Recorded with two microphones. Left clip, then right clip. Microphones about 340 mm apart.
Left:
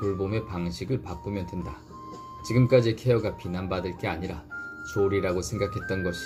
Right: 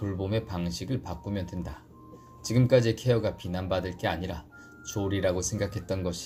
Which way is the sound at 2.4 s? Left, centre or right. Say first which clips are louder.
Left 2 dB; right.